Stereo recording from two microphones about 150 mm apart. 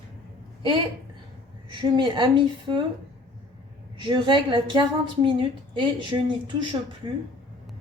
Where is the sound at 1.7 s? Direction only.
35° right (ahead or behind).